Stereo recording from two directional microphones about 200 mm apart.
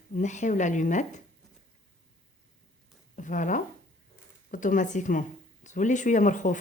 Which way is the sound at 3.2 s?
40° left (ahead or behind).